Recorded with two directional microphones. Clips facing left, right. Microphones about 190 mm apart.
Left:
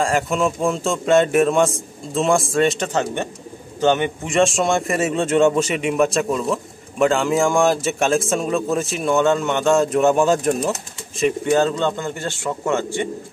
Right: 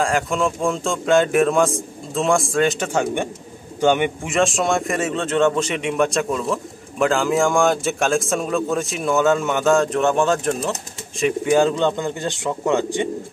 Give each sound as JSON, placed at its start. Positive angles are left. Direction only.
{"t": 0.0, "sound": "speech", "side_deg": 0}
{"t": 4.4, "sound": "speech", "side_deg": 0}
{"t": 11.4, "sound": "speech", "side_deg": -10}